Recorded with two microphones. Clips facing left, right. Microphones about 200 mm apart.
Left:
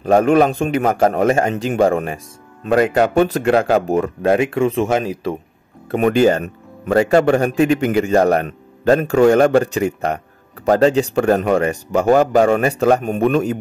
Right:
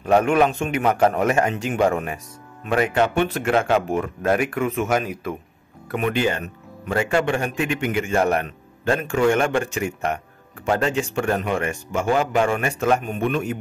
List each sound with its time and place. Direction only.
0.0 s a man's voice: 35° left (ahead or behind)
5.9 s a man's voice: 40° left (ahead or behind)